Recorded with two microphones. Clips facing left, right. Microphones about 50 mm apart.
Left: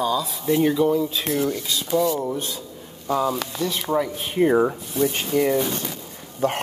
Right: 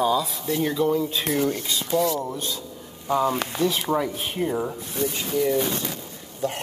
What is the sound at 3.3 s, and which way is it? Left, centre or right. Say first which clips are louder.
Speech: even; right.